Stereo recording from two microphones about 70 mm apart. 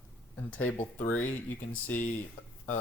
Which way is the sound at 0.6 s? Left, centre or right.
Left.